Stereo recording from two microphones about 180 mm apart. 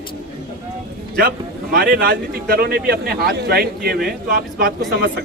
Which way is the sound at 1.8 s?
60° right (ahead or behind).